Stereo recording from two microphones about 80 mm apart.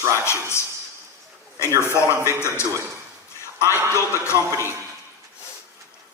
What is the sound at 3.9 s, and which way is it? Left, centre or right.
Speech, left.